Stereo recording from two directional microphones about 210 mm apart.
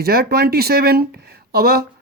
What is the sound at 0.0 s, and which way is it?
Speech, 50° right (ahead or behind).